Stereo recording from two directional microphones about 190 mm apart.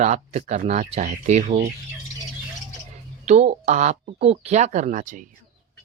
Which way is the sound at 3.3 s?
35° right (ahead or behind).